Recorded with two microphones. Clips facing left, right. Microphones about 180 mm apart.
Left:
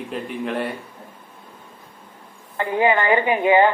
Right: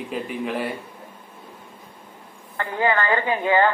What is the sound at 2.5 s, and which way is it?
A woman's voice, 20° left (ahead or behind).